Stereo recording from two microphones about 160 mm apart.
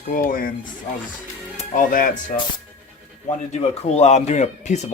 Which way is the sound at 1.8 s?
60° left (ahead or behind).